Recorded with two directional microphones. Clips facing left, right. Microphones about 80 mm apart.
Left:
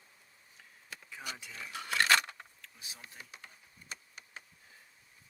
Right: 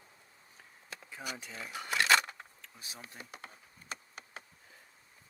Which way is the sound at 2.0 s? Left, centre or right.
Centre.